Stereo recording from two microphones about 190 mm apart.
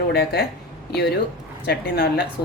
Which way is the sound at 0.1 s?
55° left (ahead or behind).